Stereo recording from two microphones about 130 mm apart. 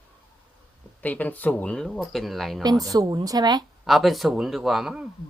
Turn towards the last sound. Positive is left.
turn(degrees=-5)  # may be behind; listen again after turning